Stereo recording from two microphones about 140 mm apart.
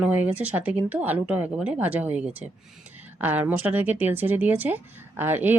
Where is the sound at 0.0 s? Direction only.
10° right (ahead or behind).